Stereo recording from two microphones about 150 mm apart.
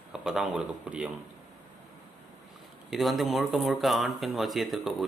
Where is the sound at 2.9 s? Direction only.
Centre (ahead or behind).